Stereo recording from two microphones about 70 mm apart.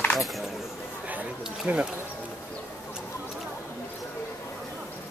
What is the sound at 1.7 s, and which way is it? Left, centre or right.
Speech, right.